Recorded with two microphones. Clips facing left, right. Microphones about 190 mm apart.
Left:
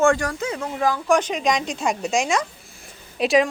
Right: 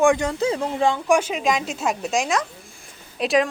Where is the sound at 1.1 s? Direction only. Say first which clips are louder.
Even; 5° right (ahead or behind).